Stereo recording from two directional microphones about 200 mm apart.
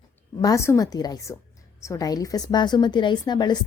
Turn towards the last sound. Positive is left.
turn(degrees=20)  # may be behind; listen again after turning